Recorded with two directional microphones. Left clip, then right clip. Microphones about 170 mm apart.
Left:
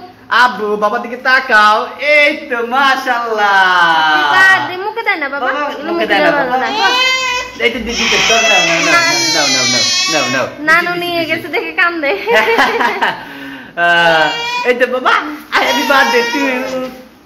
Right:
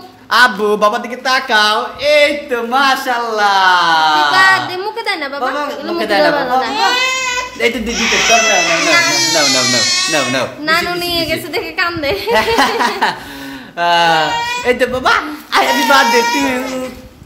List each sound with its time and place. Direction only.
0.3 s speech: 90° right
1.2 s speech: 40° right (ahead or behind)
4.3 s speech: 15° right (ahead or behind)
12.4 s speech: 55° right (ahead or behind); by 16.2 s 90° right